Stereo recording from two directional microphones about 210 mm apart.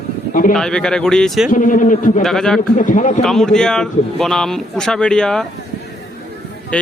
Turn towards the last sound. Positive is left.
turn(degrees=5)  # may be behind; listen again after turning